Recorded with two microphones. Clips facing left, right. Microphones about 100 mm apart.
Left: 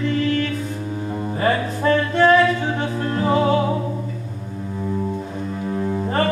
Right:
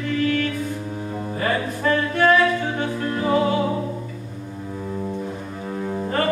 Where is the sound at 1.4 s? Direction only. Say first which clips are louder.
Left 3 dB; 30° left (ahead or behind).